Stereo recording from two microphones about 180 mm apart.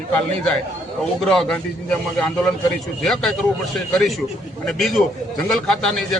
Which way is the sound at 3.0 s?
Centre (ahead or behind).